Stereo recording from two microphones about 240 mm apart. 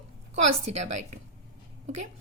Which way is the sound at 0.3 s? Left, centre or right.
Right.